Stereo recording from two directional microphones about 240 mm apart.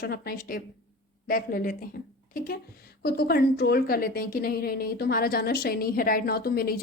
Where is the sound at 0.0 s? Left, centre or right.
Left.